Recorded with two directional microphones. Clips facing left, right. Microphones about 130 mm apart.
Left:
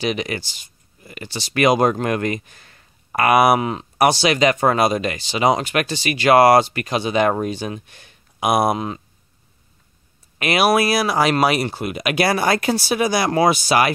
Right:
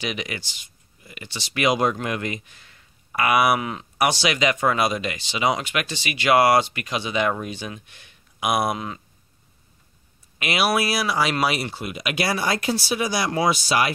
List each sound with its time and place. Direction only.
0.0 s speech: 40° left (ahead or behind)
10.4 s speech: 45° left (ahead or behind)